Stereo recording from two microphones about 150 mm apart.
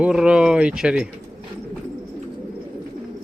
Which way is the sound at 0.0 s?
5° right (ahead or behind).